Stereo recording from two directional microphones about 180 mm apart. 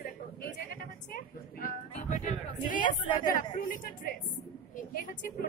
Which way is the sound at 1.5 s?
45° left (ahead or behind).